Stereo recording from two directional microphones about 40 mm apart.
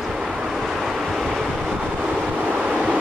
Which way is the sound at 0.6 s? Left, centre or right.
Centre.